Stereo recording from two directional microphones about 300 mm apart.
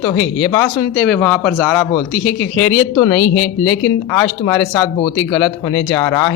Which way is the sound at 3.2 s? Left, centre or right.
Left.